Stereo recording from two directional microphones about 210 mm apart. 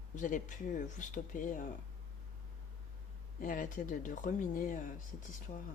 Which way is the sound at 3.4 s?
40° left (ahead or behind).